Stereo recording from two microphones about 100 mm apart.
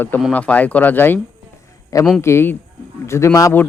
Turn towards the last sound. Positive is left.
turn(degrees=30)  # may be behind; listen again after turning